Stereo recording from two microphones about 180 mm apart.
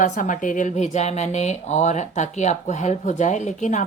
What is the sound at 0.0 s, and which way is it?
Speech, 45° left (ahead or behind).